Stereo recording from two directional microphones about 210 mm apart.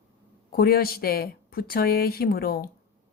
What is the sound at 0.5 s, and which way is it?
Speech, 45° left (ahead or behind).